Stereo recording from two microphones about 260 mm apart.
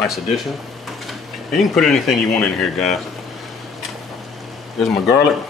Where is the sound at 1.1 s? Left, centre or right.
Centre.